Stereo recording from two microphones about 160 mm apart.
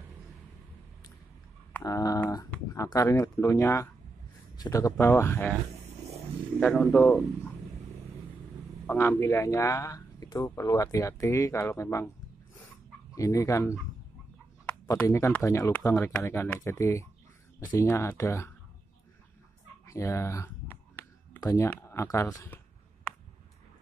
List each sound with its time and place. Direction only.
1.8 s a sound: 20° left (ahead or behind)
4.6 s a man's voice: 20° left (ahead or behind)
6.6 s speech: 5° left (ahead or behind)
8.8 s a man's voice: 15° left (ahead or behind)
13.1 s a man's voice: 20° left (ahead or behind)
15.0 s a man's voice: 20° left (ahead or behind)
19.9 s speech: 20° left (ahead or behind)